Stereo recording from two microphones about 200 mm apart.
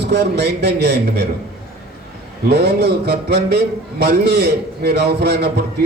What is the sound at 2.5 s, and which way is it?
A man's voice, 55° right (ahead or behind).